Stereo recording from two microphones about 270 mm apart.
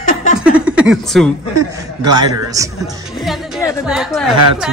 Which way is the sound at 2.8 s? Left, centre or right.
Centre.